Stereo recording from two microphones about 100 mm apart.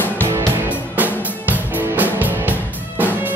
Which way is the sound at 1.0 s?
15° right (ahead or behind).